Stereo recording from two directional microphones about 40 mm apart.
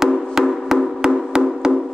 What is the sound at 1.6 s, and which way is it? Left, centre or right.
Wood block, centre.